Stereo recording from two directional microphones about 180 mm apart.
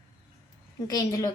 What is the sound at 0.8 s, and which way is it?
Speech, 20° left (ahead or behind).